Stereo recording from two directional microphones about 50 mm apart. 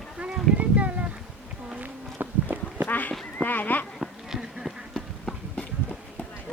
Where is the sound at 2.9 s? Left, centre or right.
Left.